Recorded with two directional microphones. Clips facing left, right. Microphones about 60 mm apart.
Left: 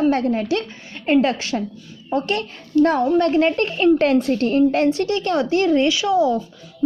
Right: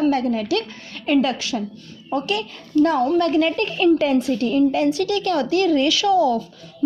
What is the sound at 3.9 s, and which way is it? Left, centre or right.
A woman's voice, left.